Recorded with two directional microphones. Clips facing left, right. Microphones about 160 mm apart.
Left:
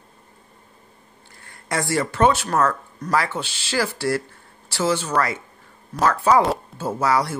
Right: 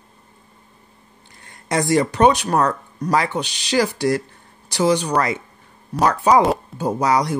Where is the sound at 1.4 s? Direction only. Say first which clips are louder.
Right 5 dB; 20° right (ahead or behind).